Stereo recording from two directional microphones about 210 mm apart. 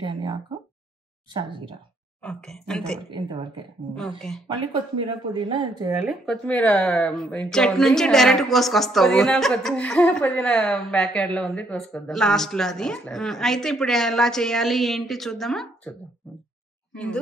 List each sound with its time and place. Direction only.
0.0 s a sound: 20° right (ahead or behind)
2.2 s speech: 5° left (ahead or behind)
3.1 s speech: 25° right (ahead or behind)
6.0 s speech: centre (ahead or behind)
16.9 s speech: 5° left (ahead or behind)